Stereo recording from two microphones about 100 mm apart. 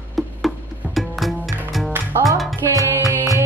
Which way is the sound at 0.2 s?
Centre (ahead or behind).